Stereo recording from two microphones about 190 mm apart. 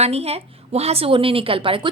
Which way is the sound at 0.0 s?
35° right (ahead or behind).